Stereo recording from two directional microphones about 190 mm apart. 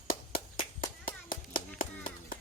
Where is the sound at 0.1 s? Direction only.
50° left (ahead or behind).